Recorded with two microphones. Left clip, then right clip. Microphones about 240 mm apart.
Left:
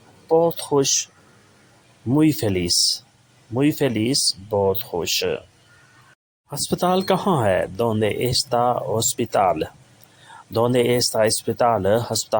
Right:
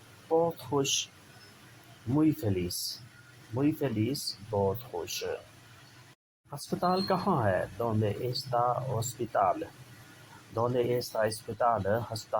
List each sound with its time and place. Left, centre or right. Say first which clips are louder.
0.3 s speech: left 10 dB; left
2.1 s speech: left 9 dB; left
6.5 s speech: left 9 dB; left